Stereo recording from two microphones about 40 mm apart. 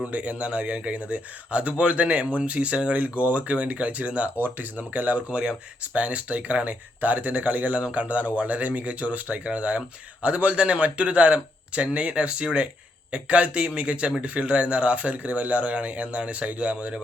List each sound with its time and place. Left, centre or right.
0.1 s speech: right
7.8 s speech: right
8.0 s speech: right